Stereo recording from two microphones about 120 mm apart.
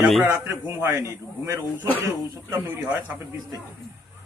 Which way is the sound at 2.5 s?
15° right (ahead or behind).